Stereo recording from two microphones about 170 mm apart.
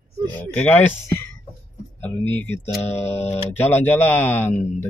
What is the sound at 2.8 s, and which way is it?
Tick, 40° left (ahead or behind).